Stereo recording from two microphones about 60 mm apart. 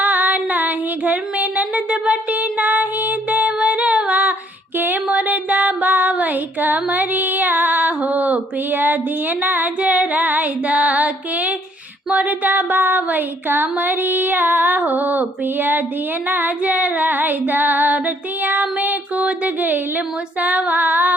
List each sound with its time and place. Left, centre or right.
0.0 s a sound: right
5.0 s music: right
6.8 s female singing: right
9.4 s music: right
12.1 s a sound: right
16.3 s female singing: right